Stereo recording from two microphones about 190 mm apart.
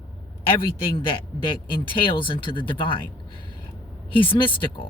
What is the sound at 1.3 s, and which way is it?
Speech, 25° left (ahead or behind).